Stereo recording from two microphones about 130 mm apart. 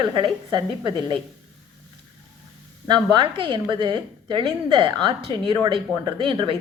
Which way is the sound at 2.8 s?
35° right (ahead or behind).